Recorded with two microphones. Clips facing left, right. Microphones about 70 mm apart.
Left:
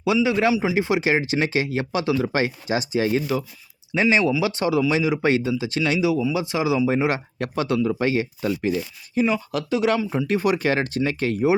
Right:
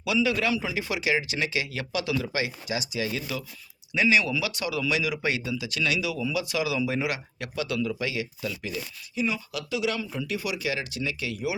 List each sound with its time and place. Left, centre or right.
0.0 s a man's voice: left